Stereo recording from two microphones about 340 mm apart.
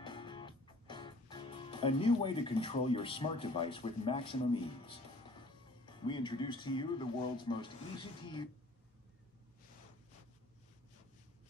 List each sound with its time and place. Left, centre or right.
0.0 s music: centre